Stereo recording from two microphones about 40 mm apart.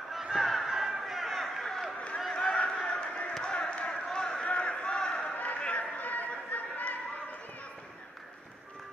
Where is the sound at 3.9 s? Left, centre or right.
Centre.